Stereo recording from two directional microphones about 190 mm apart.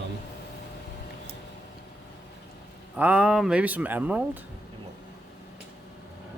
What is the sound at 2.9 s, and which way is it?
Speech, 10° right (ahead or behind).